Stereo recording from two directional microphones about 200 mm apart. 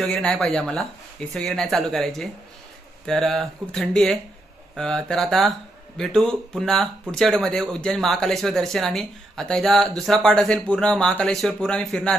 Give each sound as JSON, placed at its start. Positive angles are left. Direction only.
{"t": 0.0, "sound": "speech", "side_deg": 0}